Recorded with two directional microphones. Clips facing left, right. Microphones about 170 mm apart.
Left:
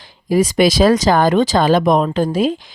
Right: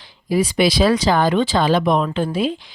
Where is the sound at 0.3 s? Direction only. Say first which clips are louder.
Left 4 dB; 45° left (ahead or behind).